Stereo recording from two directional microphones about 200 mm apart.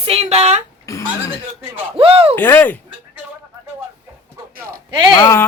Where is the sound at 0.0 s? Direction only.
30° right (ahead or behind).